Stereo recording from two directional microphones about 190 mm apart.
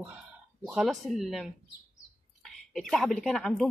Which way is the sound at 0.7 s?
Centre (ahead or behind).